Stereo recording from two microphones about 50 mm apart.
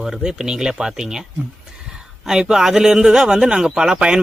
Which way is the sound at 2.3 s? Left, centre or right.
Centre.